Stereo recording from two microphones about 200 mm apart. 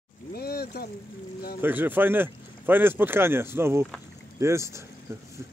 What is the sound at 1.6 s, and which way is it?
Speech, 10° right (ahead or behind).